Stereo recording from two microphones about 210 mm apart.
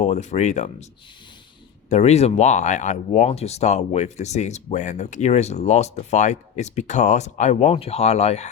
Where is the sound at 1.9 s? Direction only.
30° left (ahead or behind).